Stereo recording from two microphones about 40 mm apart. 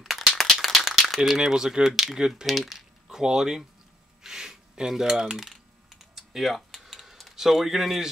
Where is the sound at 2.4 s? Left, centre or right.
Centre.